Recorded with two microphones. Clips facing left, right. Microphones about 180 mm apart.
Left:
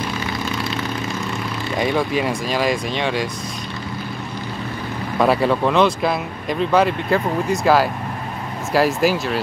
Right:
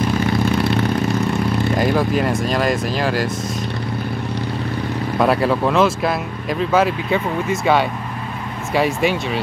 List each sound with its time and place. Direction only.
0.3 s vehicle: 60° right (ahead or behind)
1.8 s speech: centre (ahead or behind)
5.2 s speech: centre (ahead or behind)